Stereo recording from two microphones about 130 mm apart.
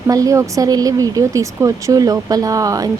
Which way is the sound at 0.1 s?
25° right (ahead or behind).